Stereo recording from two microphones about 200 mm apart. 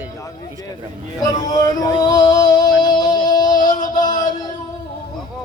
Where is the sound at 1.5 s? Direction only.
20° left (ahead or behind).